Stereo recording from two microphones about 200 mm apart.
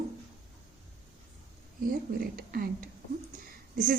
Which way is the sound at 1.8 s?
50° right (ahead or behind).